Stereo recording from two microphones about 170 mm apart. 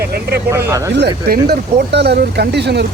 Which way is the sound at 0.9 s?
75° right (ahead or behind).